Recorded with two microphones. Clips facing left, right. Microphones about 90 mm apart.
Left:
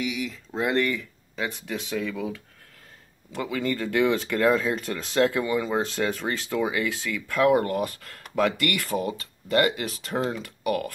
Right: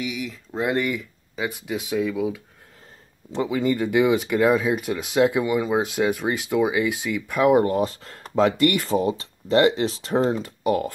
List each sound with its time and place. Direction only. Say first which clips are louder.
0.0 s speech: even; centre (ahead or behind)
3.3 s speech: right 5 dB; 20° right (ahead or behind)